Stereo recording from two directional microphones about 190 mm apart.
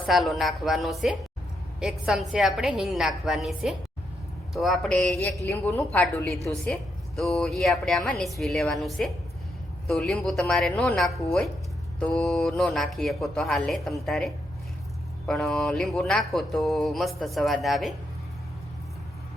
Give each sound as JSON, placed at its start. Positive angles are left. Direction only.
{"t": 0.0, "sound": "a woman's voice", "side_deg": 0}